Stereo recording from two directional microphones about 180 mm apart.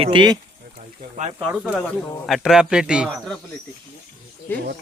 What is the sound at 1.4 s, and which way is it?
Speech, 5° right (ahead or behind).